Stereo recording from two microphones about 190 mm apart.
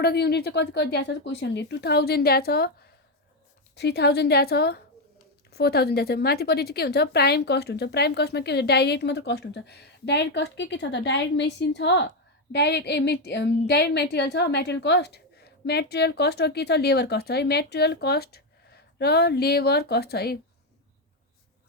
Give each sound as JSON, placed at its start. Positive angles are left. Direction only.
{"t": 0.0, "sound": "a woman's voice", "side_deg": 60}